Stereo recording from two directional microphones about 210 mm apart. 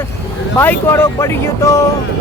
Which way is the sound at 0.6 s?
10° left (ahead or behind).